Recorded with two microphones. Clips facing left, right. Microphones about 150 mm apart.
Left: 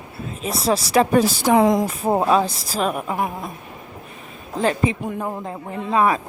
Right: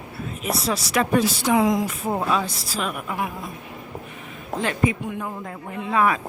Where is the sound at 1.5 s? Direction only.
55° left (ahead or behind).